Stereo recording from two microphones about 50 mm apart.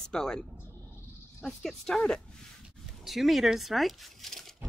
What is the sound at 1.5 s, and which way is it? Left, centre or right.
Speech, centre.